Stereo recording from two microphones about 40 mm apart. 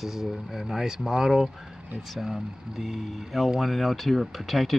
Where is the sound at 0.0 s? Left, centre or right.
Centre.